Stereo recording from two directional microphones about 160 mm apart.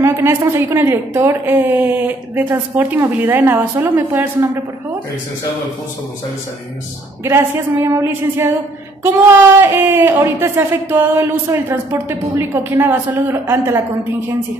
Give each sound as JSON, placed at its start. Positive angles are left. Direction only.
{"t": 0.0, "sound": "a woman's voice", "side_deg": -15}
{"t": 7.2, "sound": "a woman's voice", "side_deg": -15}
{"t": 9.6, "sound": "a woman's voice", "side_deg": -15}